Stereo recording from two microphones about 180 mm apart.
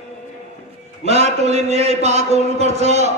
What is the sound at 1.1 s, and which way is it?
A man's voice, 35° right (ahead or behind).